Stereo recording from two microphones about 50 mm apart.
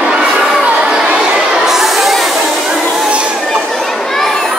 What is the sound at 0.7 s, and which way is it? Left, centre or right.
Chatter, right.